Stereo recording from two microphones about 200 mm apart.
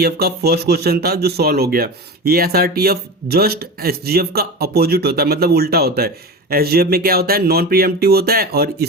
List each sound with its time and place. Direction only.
0.0 s speech: 50° right (ahead or behind)